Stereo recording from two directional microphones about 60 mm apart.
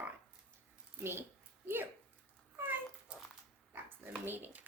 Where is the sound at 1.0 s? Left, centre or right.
Right.